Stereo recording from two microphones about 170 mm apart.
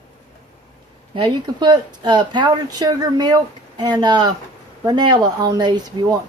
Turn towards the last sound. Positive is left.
turn(degrees=-25)  # may be behind; listen again after turning